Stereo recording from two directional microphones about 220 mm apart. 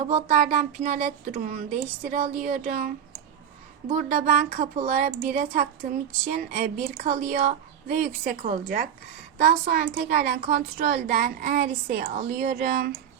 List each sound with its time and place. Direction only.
0.1 s a woman's voice: 35° right (ahead or behind)